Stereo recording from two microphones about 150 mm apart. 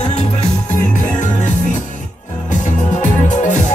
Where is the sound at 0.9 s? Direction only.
55° left (ahead or behind).